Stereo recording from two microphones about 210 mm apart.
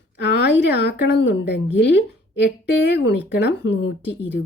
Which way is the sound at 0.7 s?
50° left (ahead or behind).